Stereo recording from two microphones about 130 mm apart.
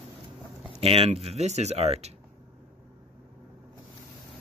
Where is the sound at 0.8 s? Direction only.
50° right (ahead or behind).